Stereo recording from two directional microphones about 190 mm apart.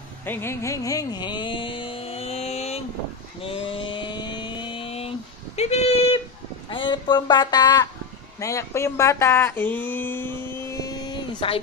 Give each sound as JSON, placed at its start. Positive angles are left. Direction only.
{"t": 0.2, "sound": "music", "side_deg": 10}
{"t": 3.3, "sound": "a sound", "side_deg": 30}
{"t": 6.7, "sound": "speech", "side_deg": 25}